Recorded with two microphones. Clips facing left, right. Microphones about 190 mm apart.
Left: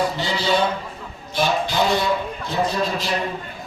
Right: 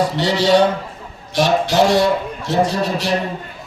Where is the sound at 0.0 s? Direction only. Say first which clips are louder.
Right 6 dB; 75° right (ahead or behind).